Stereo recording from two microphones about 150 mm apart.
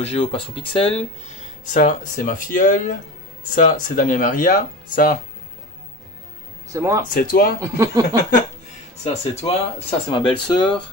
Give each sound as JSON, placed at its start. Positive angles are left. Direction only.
{"t": 0.0, "sound": "speech", "side_deg": 40}
{"t": 1.7, "sound": "speech", "side_deg": 65}
{"t": 6.7, "sound": "speech", "side_deg": -20}
{"t": 7.2, "sound": "speech", "side_deg": 80}
{"t": 7.6, "sound": "speech", "side_deg": -25}
{"t": 9.0, "sound": "speech", "side_deg": 40}